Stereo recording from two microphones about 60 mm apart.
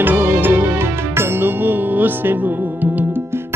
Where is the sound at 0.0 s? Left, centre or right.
Right.